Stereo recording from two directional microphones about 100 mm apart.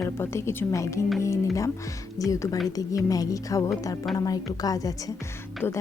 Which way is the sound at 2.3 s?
35° left (ahead or behind).